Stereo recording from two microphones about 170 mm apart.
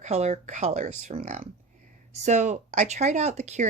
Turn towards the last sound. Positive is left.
turn(degrees=-40)  # may be behind; listen again after turning